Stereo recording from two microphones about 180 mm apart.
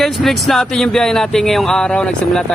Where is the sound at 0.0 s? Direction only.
Centre (ahead or behind).